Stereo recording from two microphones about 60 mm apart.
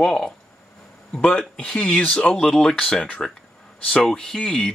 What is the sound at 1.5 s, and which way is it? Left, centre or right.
Speech, centre.